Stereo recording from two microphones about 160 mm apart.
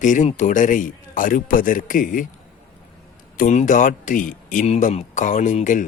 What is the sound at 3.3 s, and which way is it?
Speech, 50° left (ahead or behind).